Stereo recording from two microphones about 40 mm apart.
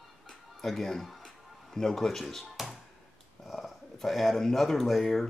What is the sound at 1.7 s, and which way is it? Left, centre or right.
Speech, centre.